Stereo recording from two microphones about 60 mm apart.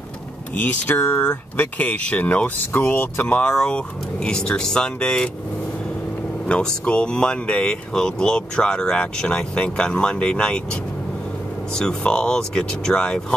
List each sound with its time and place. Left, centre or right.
0.6 s speech: left
3.3 s speech: centre
6.4 s speech: centre
12.1 s speech: centre